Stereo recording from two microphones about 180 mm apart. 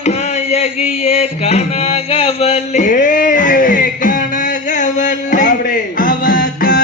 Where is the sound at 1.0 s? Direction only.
35° left (ahead or behind).